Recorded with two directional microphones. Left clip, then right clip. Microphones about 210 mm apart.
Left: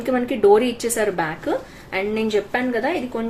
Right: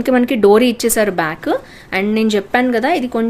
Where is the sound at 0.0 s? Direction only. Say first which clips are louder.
Right 5 dB; 45° right (ahead or behind).